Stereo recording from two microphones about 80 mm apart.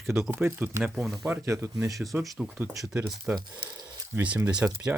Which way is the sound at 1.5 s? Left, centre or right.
Right.